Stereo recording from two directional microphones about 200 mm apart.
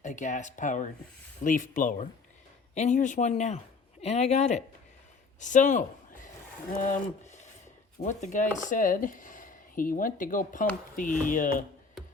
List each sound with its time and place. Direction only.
0.0 s speech: 40° left (ahead or behind)